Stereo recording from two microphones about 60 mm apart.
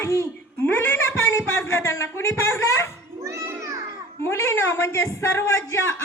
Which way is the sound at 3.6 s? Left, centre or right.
Right.